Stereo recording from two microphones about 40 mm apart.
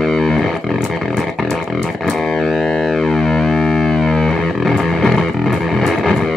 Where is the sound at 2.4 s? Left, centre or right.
Centre.